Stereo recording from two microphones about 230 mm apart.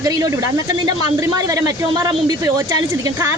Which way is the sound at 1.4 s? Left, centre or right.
Centre.